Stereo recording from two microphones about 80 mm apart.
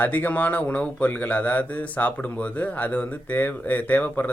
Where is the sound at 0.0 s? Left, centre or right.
Left.